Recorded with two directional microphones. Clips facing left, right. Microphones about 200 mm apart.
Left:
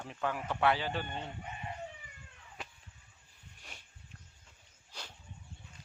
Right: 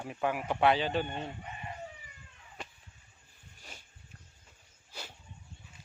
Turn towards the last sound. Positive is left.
turn(degrees=-5)  # may be behind; listen again after turning